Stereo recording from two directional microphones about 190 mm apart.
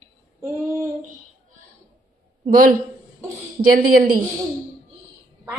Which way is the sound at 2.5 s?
45° right (ahead or behind).